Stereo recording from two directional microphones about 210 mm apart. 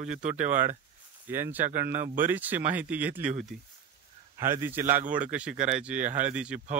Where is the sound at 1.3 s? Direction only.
10° right (ahead or behind).